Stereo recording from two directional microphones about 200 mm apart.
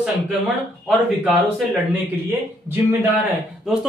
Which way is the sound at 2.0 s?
10° right (ahead or behind).